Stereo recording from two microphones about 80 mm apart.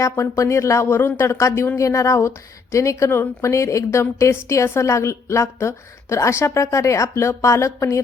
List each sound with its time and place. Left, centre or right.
0.0 s a woman's voice: left